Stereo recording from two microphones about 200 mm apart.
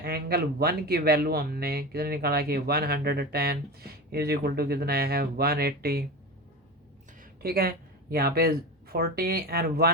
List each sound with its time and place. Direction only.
0.0 s speech: 50° right (ahead or behind)
7.2 s speech: 50° right (ahead or behind)